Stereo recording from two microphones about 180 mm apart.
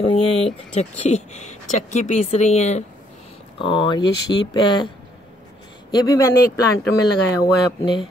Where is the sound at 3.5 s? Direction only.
25° left (ahead or behind).